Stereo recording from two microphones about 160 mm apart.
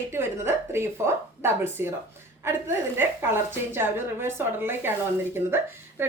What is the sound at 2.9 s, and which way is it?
Speech, 15° right (ahead or behind).